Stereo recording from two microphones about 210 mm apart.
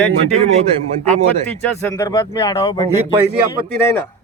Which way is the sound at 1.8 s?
15° left (ahead or behind).